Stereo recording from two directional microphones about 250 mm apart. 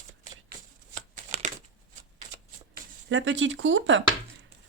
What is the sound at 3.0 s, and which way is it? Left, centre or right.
Speech, right.